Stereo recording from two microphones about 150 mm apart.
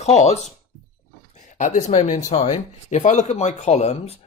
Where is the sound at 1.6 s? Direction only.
50° left (ahead or behind).